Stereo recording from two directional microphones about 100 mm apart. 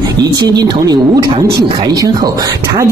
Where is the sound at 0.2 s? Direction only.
40° right (ahead or behind).